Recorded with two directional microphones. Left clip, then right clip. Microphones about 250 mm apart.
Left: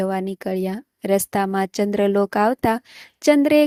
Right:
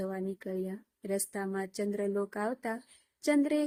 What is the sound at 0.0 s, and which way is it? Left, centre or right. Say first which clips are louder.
Speech: left 13 dB; left.